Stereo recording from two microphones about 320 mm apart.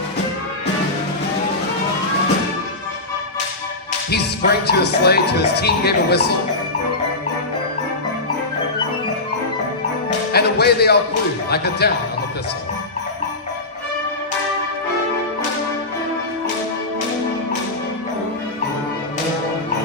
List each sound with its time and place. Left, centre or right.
4.1 s speech: left
10.3 s speech: left